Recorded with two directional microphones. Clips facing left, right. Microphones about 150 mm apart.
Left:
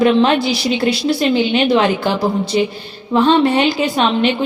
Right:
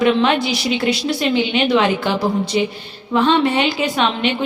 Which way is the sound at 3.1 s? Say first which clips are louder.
Left 3 dB; 40° left (ahead or behind).